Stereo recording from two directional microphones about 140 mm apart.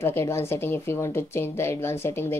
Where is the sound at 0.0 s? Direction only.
20° left (ahead or behind).